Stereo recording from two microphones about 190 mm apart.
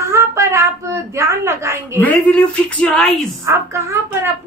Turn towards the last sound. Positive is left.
turn(degrees=-15)  # may be behind; listen again after turning